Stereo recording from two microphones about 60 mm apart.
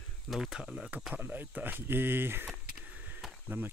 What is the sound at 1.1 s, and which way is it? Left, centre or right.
Speech, right.